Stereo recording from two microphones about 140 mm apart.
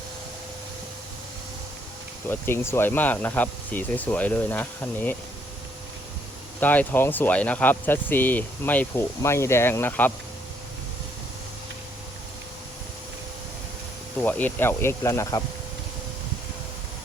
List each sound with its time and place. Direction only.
2.3 s speech: 15° left (ahead or behind)
6.6 s speech: 10° left (ahead or behind)
14.2 s speech: 10° left (ahead or behind)